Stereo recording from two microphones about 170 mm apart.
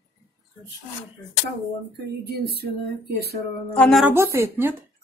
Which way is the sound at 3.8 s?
5° left (ahead or behind).